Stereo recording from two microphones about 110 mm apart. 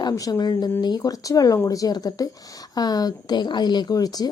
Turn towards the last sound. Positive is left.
turn(degrees=35)  # may be behind; listen again after turning